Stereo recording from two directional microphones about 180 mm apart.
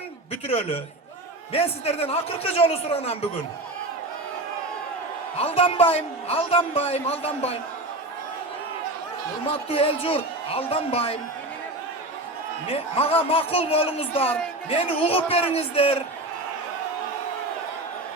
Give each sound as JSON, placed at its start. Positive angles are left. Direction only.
{"t": 0.4, "sound": "a man's voice", "side_deg": 30}
{"t": 5.4, "sound": "a man's voice", "side_deg": 30}
{"t": 9.5, "sound": "a man's voice", "side_deg": 30}
{"t": 12.6, "sound": "a man's voice", "side_deg": 30}